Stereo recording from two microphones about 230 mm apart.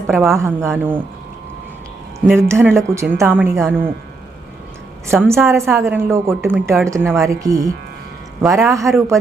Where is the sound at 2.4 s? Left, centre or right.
Centre.